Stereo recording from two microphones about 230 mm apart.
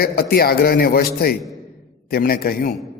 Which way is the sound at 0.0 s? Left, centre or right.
Left.